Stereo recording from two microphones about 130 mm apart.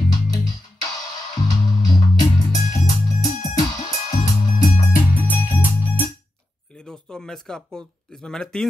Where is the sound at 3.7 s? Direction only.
70° left (ahead or behind).